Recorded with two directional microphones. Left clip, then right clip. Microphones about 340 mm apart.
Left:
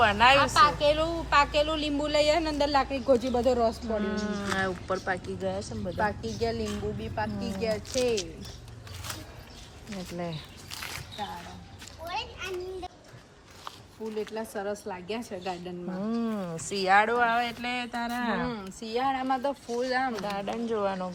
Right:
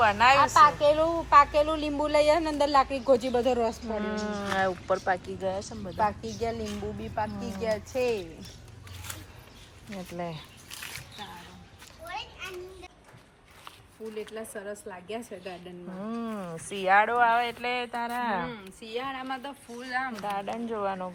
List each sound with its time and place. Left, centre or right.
0.0 s speech: centre
0.3 s a woman's voice: centre
3.9 s speech: centre
6.0 s a woman's voice: centre
9.9 s speech: centre
14.8 s speech: left
16.0 s speech: centre
18.5 s speech: left
20.2 s speech: centre